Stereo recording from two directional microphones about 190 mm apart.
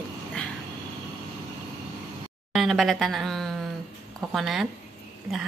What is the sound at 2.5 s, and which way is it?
Speech, centre (ahead or behind).